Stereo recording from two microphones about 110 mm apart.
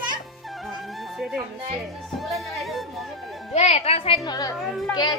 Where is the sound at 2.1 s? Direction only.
Centre (ahead or behind).